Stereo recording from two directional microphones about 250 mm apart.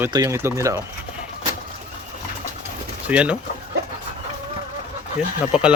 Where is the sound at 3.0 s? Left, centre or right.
Centre.